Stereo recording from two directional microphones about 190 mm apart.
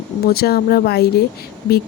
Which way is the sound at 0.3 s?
55° left (ahead or behind).